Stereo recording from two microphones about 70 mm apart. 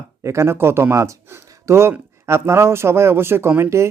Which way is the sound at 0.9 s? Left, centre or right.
Right.